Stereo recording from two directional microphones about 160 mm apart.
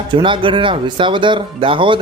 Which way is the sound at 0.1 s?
30° right (ahead or behind).